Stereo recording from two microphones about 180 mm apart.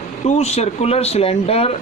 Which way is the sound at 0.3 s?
35° left (ahead or behind).